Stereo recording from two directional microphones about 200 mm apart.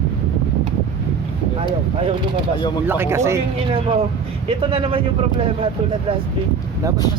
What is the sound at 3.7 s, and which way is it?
Speech, 25° right (ahead or behind).